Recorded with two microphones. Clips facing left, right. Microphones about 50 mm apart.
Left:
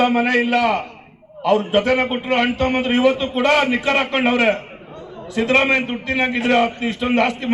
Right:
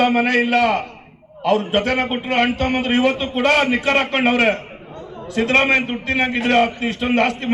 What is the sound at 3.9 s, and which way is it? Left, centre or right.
A man's voice, right.